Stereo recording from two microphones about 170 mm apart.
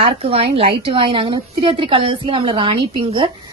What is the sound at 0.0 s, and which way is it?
A woman's voice, 35° right (ahead or behind).